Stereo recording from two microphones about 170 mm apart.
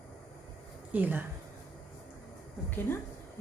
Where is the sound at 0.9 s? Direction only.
10° right (ahead or behind).